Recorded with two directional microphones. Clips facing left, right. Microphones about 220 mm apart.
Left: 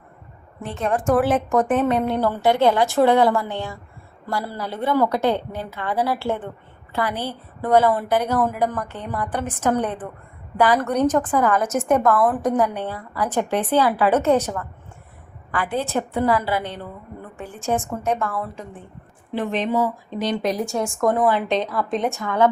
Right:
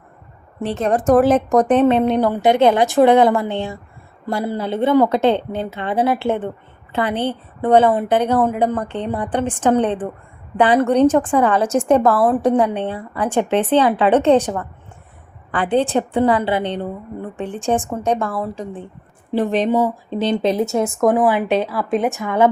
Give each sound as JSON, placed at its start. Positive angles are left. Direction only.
{"t": 0.7, "sound": "a woman's voice", "side_deg": -35}
{"t": 22.1, "sound": "a woman's voice", "side_deg": -20}